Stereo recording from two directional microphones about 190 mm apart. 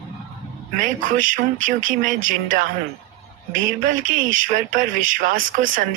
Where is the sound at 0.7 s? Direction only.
45° right (ahead or behind).